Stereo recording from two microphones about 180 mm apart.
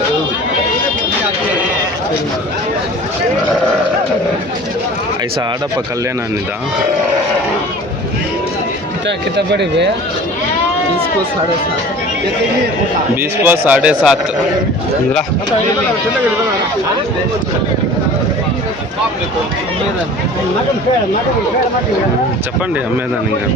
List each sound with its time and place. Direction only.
9.0 s speech: 70° right (ahead or behind)
13.4 s speech: 10° right (ahead or behind)